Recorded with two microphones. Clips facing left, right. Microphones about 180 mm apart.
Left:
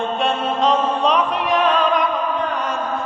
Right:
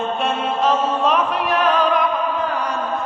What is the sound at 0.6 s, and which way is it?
Music, 5° right (ahead or behind).